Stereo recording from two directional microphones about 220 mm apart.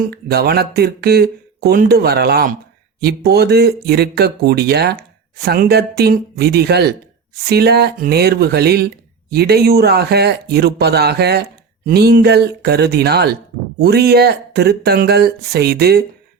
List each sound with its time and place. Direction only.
0.0 s speech: 45° right (ahead or behind)